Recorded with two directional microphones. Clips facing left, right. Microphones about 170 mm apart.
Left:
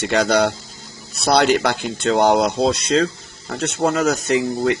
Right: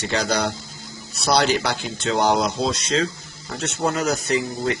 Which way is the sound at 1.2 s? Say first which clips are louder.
Left 4 dB; 55° left (ahead or behind).